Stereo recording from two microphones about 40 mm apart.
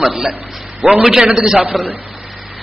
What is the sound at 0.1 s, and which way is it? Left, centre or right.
A man's voice, centre.